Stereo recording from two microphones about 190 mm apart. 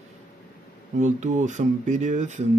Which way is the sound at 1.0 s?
40° right (ahead or behind).